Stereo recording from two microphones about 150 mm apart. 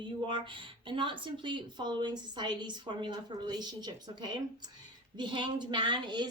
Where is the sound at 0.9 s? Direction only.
35° right (ahead or behind).